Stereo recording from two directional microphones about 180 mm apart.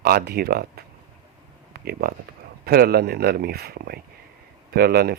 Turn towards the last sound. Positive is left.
turn(degrees=-60)  # may be behind; listen again after turning